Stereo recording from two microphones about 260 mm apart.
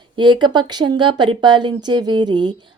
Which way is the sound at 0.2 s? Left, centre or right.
Centre.